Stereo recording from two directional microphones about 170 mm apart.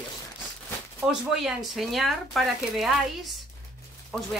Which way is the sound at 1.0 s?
Centre (ahead or behind).